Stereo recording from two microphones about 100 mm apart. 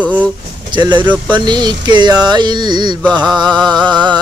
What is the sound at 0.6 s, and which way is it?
Speech, 50° right (ahead or behind).